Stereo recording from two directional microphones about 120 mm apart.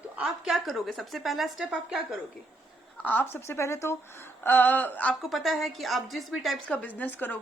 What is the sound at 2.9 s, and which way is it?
Speech, 15° left (ahead or behind).